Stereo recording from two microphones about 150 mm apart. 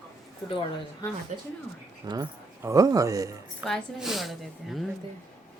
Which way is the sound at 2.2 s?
20° right (ahead or behind).